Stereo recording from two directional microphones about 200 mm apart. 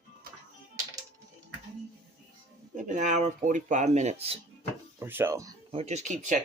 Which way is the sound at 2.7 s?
40° right (ahead or behind).